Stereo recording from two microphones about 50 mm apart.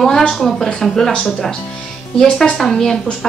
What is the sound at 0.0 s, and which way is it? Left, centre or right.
A woman's voice, centre.